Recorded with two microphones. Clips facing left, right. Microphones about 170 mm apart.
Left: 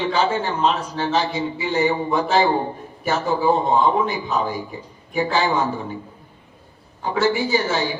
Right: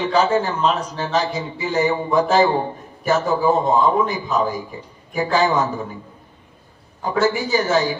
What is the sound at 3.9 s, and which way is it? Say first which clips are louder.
A man's voice: right 2 dB; 45° right (ahead or behind).